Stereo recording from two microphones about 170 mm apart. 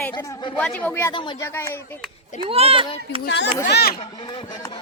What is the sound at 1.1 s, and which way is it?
Speech, 25° left (ahead or behind).